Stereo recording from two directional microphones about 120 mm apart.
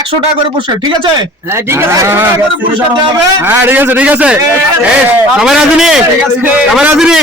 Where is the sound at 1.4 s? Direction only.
20° right (ahead or behind).